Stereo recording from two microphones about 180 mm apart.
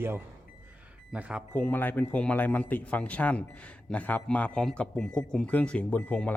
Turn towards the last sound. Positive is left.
turn(degrees=10)  # may be behind; listen again after turning